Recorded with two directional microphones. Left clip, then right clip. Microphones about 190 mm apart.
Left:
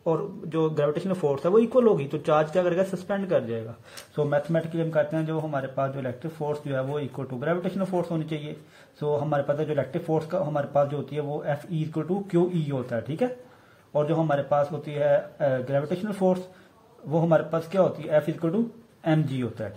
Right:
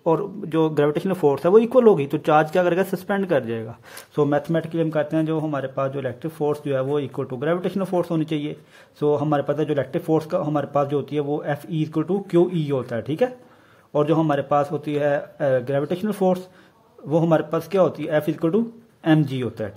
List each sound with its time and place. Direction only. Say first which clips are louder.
0.0 s speech: right 5 dB; 40° right (ahead or behind)